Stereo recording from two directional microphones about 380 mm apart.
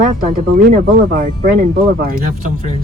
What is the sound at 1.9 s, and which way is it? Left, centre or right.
Speech, right.